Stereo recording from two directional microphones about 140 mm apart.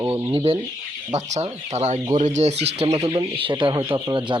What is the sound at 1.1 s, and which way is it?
Speech, 55° right (ahead or behind).